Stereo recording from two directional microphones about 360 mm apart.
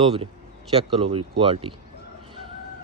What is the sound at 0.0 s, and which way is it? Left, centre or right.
Speech, centre.